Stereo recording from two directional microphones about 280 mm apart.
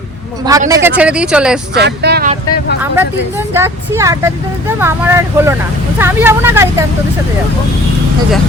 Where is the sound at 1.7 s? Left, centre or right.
Right.